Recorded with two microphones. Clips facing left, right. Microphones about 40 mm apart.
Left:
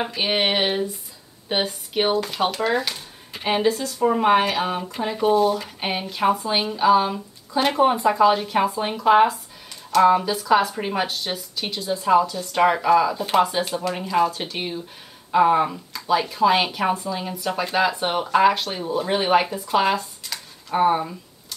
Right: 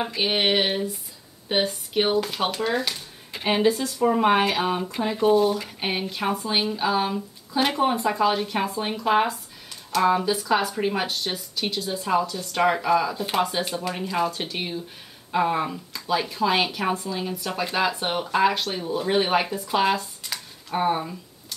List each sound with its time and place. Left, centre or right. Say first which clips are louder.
0.0 s speech: left 1 dB; centre
3.6 s speech: right 1 dB; centre
4.0 s speech: left 2 dB; centre